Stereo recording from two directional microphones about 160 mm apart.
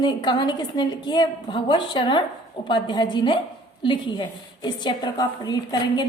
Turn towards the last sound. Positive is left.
turn(degrees=25)  # may be behind; listen again after turning